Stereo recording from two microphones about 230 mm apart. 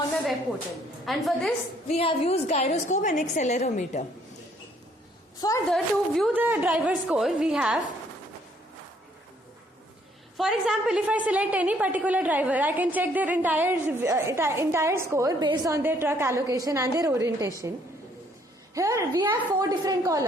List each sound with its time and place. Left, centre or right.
1.0 s a woman's voice: centre
1.9 s a woman's voice: left
5.4 s a woman's voice: centre
5.7 s a woman's voice: centre
10.3 s a woman's voice: centre
18.7 s a woman's voice: centre